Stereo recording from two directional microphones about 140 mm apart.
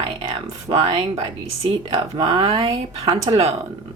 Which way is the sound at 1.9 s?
40° right (ahead or behind).